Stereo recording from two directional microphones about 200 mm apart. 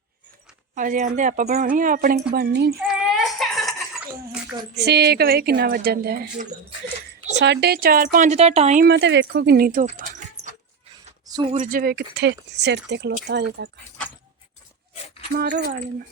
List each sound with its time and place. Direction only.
0.8 s speech: 40° right (ahead or behind)
2.8 s a sound: centre (ahead or behind)
4.7 s a woman's voice: 55° right (ahead or behind)
7.3 s a woman's voice: 60° right (ahead or behind); by 8.8 s 35° right (ahead or behind)
8.8 s speech: 60° right (ahead or behind); by 10.5 s 40° right (ahead or behind)
11.6 s speech: 45° right (ahead or behind)
15.4 s a woman's voice: 50° right (ahead or behind)